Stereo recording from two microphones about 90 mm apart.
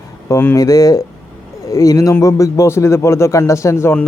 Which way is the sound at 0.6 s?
40° left (ahead or behind).